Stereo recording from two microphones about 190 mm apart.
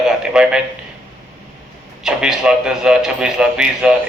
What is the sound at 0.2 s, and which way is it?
Speech, 5° right (ahead or behind).